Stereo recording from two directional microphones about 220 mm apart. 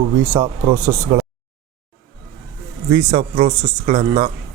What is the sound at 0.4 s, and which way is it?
Speech, 25° right (ahead or behind).